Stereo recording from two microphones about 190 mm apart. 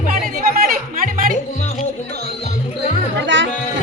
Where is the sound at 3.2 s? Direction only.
70° right (ahead or behind).